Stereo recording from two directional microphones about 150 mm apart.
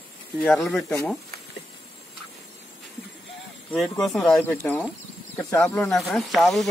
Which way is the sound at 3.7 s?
5° left (ahead or behind).